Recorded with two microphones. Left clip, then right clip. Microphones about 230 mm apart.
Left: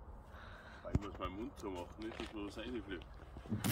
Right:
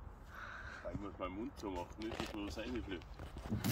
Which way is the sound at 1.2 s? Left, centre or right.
Right.